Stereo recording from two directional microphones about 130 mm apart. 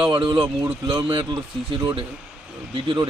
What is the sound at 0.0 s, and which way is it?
A man's voice, 35° right (ahead or behind).